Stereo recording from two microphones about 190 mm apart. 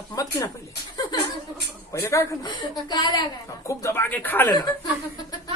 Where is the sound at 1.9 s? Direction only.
15° left (ahead or behind).